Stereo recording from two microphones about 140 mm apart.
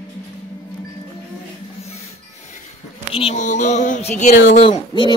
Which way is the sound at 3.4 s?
60° left (ahead or behind).